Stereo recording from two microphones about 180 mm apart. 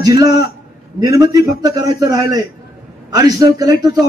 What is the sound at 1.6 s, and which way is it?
A man's voice, 20° right (ahead or behind).